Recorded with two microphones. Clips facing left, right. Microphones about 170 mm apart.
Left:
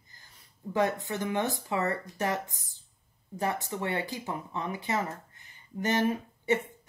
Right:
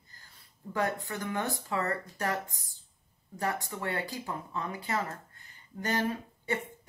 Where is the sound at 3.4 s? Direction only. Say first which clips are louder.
Left 2 dB; 20° left (ahead or behind).